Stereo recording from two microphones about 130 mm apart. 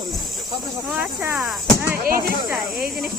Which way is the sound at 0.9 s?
10° right (ahead or behind).